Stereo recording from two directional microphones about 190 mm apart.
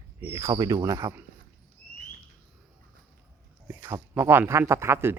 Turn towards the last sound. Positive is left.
turn(degrees=-15)  # may be behind; listen again after turning